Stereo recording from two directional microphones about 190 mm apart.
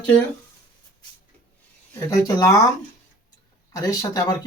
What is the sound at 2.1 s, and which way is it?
Speech, 15° left (ahead or behind).